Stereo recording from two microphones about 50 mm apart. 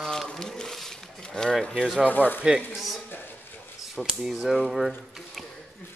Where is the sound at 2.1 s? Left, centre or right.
Left.